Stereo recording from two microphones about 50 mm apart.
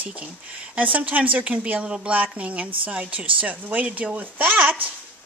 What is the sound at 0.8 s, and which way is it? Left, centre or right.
A woman's voice, right.